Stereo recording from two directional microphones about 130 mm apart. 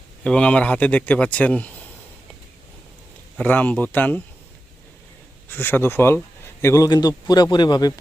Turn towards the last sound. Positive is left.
turn(degrees=30)  # may be behind; listen again after turning